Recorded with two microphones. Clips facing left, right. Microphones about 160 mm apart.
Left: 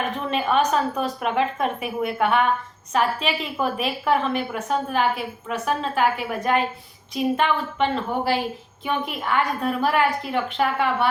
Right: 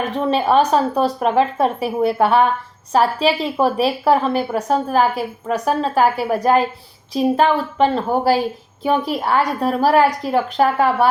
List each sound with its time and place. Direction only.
0.1 s a woman's voice: 35° right (ahead or behind)